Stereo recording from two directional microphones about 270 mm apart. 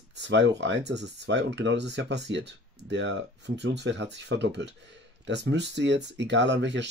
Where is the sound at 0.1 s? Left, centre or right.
Right.